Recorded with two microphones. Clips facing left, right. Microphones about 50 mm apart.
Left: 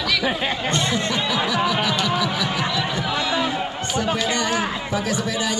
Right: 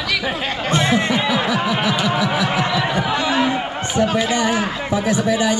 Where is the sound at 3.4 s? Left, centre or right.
Right.